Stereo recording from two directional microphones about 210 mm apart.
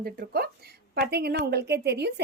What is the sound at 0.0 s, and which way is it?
A woman's voice, 50° right (ahead or behind).